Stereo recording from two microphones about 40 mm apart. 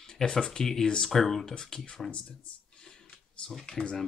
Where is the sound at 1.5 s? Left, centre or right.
Centre.